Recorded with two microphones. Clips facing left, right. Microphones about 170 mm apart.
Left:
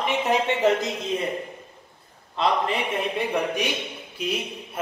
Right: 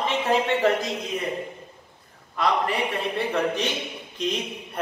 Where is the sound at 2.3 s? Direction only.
25° left (ahead or behind); by 4.8 s 10° left (ahead or behind).